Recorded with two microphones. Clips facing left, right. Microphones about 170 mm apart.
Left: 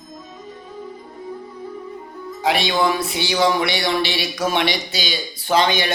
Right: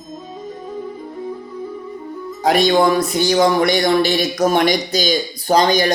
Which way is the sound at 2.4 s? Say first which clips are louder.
Right 5 dB; 45° right (ahead or behind).